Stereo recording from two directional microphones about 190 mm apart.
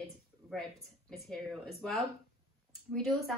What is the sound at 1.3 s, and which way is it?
Speech, centre (ahead or behind).